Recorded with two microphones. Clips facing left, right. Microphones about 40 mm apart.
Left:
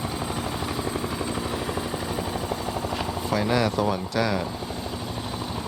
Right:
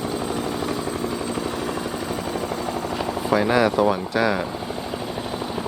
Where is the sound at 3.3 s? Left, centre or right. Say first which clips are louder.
Right 5 dB; centre.